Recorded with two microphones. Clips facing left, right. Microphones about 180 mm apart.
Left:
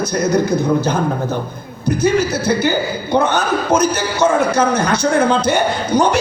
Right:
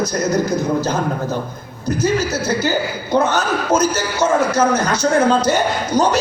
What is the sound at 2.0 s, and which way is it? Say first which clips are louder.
Speech: left 3 dB; 60° left (ahead or behind).